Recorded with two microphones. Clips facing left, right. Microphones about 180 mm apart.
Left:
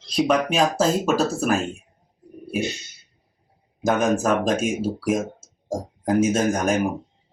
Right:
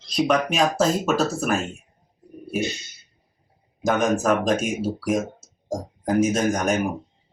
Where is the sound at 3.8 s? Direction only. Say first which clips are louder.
Left 1 dB; centre (ahead or behind).